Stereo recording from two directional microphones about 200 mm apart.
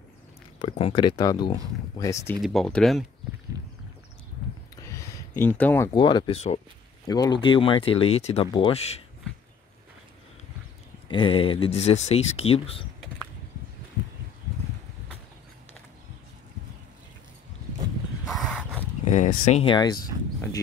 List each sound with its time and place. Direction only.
0.6 s speech: 25° left (ahead or behind)
2.4 s speech: centre (ahead or behind)
4.7 s a sound: 15° left (ahead or behind)
5.9 s speech: 25° left (ahead or behind)
7.1 s speech: 20° left (ahead or behind)
11.1 s speech: 25° left (ahead or behind)
18.3 s a sound: centre (ahead or behind)
19.0 s speech: 40° left (ahead or behind); by 20.0 s 25° left (ahead or behind)